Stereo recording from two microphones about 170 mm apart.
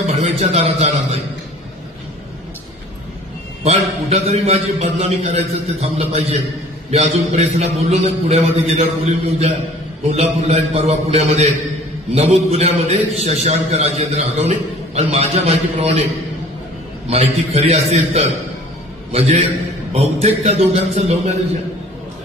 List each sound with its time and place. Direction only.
0.0 s a man's voice: 40° right (ahead or behind)
3.6 s a man's voice: 35° right (ahead or behind)
17.1 s a man's voice: 35° right (ahead or behind)